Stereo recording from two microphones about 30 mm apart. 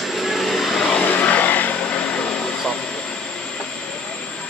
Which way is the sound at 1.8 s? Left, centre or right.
Left.